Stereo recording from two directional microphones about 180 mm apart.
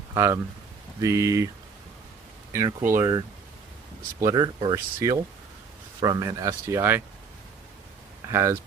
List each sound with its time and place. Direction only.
0.1 s speech: 15° right (ahead or behind)
2.5 s speech: 15° right (ahead or behind)
8.3 s speech: 15° right (ahead or behind)